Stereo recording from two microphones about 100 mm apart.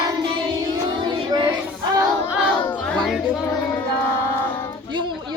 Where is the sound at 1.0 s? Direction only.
50° right (ahead or behind).